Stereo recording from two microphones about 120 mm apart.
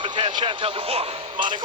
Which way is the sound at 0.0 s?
45° right (ahead or behind).